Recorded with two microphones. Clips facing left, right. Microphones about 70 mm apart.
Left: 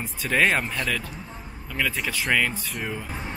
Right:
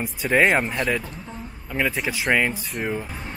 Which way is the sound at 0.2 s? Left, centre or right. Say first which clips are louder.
Right 3 dB; centre.